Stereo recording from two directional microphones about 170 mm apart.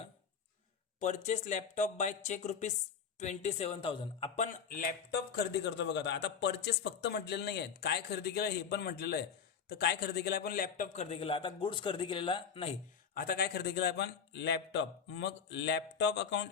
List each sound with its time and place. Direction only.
0.9 s a man's voice: 45° left (ahead or behind)
4.4 s speech: 55° left (ahead or behind)
5.4 s a man's voice: 85° left; by 10.8 s 60° left (ahead or behind)
10.9 s a man's voice: 40° left (ahead or behind)
13.1 s a man's voice: 65° left (ahead or behind); by 16.5 s 90° left